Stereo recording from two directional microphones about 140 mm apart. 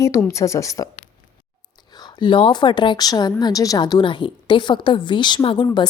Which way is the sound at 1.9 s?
30° left (ahead or behind).